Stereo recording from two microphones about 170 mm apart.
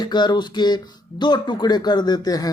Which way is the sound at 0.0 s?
25° left (ahead or behind).